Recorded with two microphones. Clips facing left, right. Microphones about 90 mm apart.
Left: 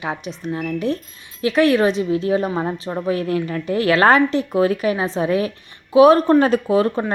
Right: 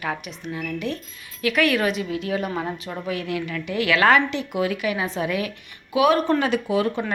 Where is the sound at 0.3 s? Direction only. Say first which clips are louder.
Left 6 dB; 35° left (ahead or behind).